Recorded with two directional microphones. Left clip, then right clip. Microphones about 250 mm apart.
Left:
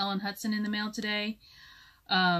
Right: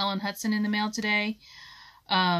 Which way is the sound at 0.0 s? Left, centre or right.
Right.